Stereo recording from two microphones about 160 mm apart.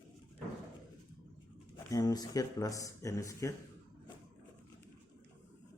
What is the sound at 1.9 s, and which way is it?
Speech, 25° left (ahead or behind).